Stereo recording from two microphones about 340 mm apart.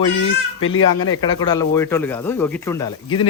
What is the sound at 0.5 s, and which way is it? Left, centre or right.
Speech, left.